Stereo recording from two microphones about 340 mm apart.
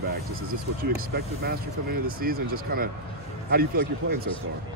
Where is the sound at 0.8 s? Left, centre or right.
Right.